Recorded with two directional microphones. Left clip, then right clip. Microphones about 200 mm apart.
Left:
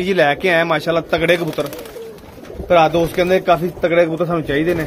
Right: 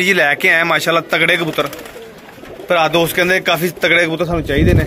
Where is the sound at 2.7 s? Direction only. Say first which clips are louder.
Even; centre (ahead or behind).